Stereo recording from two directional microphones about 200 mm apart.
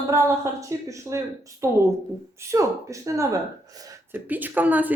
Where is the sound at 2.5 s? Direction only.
15° right (ahead or behind).